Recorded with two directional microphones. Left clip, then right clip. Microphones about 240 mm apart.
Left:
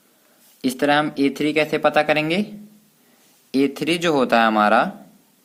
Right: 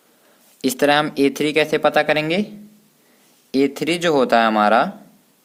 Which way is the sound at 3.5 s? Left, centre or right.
Centre.